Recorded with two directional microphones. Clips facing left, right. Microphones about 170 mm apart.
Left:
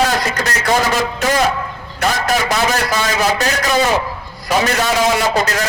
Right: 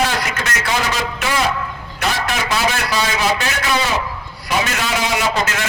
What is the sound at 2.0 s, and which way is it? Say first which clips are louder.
A man's voice: left 4 dB; 40° left (ahead or behind).